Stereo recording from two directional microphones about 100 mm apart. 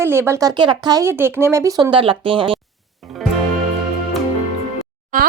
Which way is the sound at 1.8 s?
55° right (ahead or behind).